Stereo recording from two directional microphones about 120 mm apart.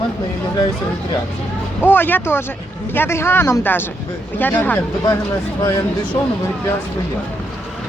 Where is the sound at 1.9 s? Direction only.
15° left (ahead or behind).